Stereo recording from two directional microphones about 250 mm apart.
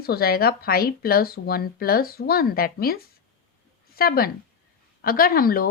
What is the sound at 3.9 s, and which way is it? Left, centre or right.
Speech, left.